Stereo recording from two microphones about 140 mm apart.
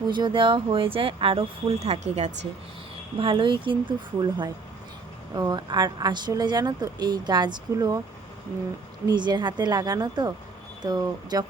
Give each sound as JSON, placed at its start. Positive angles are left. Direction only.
{"t": 0.1, "sound": "speech", "side_deg": -35}
{"t": 3.2, "sound": "speech", "side_deg": -35}
{"t": 9.0, "sound": "speech", "side_deg": -30}